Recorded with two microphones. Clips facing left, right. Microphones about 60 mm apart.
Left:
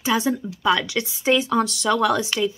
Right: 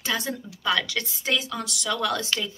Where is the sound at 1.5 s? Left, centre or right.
Left.